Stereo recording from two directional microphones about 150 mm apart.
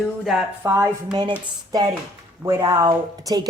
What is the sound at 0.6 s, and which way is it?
Speech, 15° right (ahead or behind).